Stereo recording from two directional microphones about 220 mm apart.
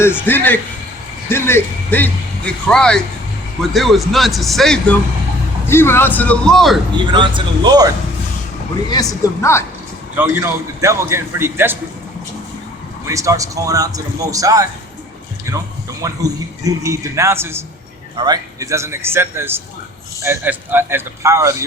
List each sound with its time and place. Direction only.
0.0 s a man's voice: 10° left (ahead or behind)
7.1 s speech: 20° right (ahead or behind)
8.9 s speech: 15° left (ahead or behind)
10.2 s a man's voice: 10° right (ahead or behind)
13.1 s a man's voice: 15° right (ahead or behind)